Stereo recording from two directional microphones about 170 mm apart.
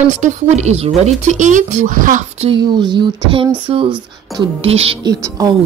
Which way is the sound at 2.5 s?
25° right (ahead or behind).